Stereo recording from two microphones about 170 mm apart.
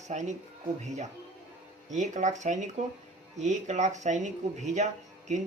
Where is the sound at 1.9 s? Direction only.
45° right (ahead or behind).